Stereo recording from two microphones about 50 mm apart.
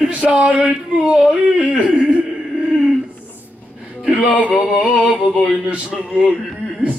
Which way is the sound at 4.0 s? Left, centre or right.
Centre.